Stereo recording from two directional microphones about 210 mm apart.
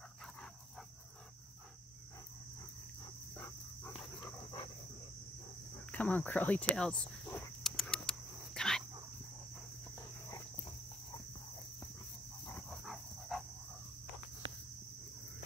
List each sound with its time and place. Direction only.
3.3 s dog: 10° left (ahead or behind)
5.9 s cricket: 5° left (ahead or behind)
9.9 s cricket: 20° left (ahead or behind)
12.4 s dog: 5° left (ahead or behind)